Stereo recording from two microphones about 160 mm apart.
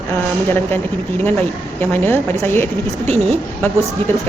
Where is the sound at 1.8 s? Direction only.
10° left (ahead or behind).